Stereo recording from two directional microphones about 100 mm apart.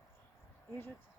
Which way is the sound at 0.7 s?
20° left (ahead or behind).